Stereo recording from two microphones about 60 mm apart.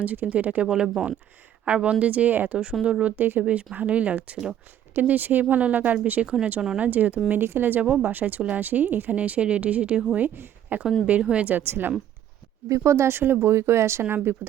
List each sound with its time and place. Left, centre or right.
0.0 s speech: right
3.4 s speech: right
7.3 s speech: right
7.9 s speech: centre
10.2 s a woman's voice: right
11.0 s speech: centre
11.4 s speech: right
12.6 s speech: right